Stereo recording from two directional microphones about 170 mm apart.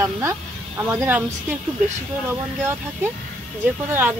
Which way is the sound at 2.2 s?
10° right (ahead or behind).